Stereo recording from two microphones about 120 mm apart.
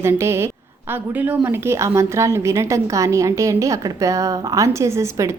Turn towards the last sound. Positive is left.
turn(degrees=-25)  # may be behind; listen again after turning